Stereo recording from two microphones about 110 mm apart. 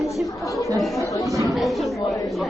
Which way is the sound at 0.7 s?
Centre (ahead or behind).